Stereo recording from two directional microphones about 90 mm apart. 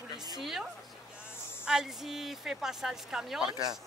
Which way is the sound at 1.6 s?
5° right (ahead or behind).